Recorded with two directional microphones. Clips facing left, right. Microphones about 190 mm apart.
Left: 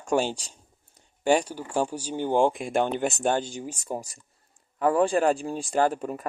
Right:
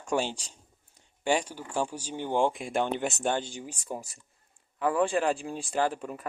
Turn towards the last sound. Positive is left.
turn(degrees=45)  # may be behind; listen again after turning